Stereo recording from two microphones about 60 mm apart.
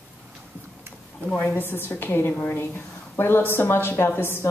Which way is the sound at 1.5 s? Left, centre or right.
Left.